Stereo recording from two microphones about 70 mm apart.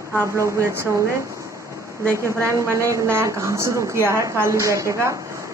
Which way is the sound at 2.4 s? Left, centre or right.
Right.